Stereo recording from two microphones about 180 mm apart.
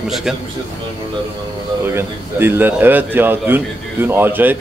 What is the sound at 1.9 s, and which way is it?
A man's voice, 10° right (ahead or behind).